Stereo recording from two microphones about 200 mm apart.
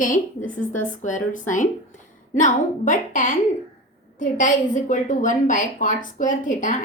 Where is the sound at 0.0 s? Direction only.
40° left (ahead or behind).